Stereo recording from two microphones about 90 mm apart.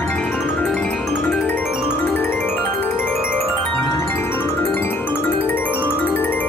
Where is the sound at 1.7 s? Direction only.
10° right (ahead or behind).